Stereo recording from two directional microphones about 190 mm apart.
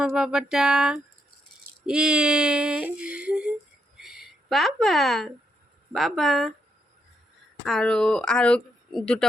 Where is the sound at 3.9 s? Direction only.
Centre (ahead or behind).